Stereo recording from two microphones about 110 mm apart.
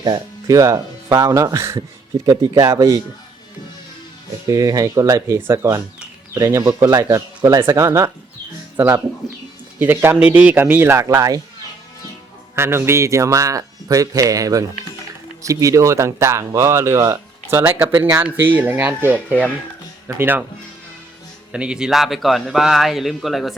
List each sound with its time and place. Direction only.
0.0 s speech: 35° right (ahead or behind)
2.2 s speech: 35° right (ahead or behind)
4.4 s speech: 30° right (ahead or behind)
8.7 s speech: 20° right (ahead or behind)
11.1 s speech: 35° right (ahead or behind)
12.5 s speech: 20° right (ahead or behind)
21.5 s speech: 10° right (ahead or behind)